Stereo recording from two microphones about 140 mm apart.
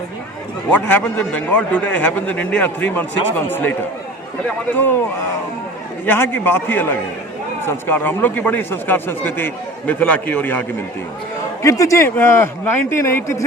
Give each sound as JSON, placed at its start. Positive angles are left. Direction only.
{"t": 0.7, "sound": "a man's voice", "side_deg": 10}
{"t": 6.1, "sound": "a man's voice", "side_deg": 15}
{"t": 7.9, "sound": "a man's voice", "side_deg": 15}